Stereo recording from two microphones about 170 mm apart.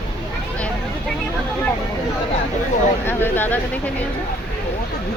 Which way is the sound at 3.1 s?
10° left (ahead or behind).